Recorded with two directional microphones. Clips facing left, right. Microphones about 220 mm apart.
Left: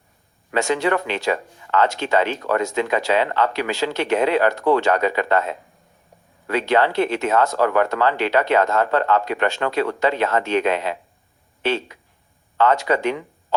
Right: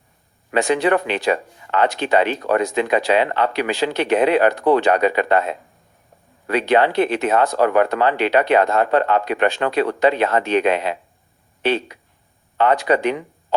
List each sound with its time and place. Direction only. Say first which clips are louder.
0.5 s speech: right 3 dB; 15° right (ahead or behind)